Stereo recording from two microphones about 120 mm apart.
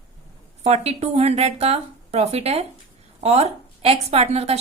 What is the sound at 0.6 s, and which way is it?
A woman's voice, 60° right (ahead or behind).